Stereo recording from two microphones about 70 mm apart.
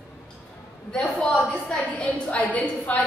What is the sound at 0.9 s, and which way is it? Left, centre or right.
A woman's voice, centre.